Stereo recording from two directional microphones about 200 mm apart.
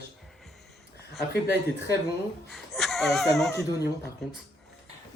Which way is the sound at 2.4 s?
Centre (ahead or behind).